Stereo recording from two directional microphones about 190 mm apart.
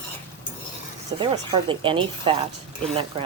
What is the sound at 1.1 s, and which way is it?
Speech, 25° right (ahead or behind).